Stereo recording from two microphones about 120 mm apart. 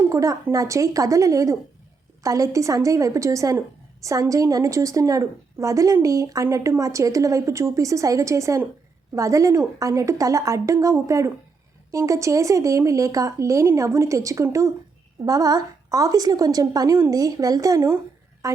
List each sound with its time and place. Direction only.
0.0 s a woman's voice: 25° right (ahead or behind)